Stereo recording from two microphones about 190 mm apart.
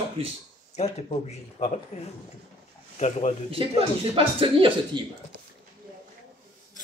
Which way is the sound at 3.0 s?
35° left (ahead or behind).